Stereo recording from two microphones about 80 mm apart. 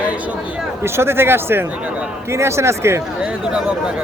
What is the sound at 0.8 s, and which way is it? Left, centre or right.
A man's voice, right.